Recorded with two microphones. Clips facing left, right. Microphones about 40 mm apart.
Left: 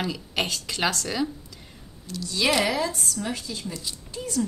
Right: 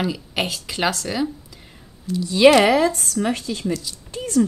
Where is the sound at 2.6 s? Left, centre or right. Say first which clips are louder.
Right 8 dB; right.